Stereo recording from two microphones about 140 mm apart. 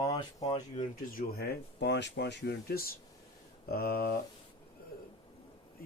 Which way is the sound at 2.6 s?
90° left.